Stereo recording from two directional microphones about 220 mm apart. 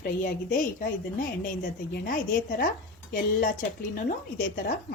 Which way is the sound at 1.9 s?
40° left (ahead or behind).